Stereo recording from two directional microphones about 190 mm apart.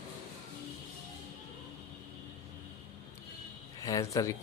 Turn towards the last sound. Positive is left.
turn(degrees=15)  # may be behind; listen again after turning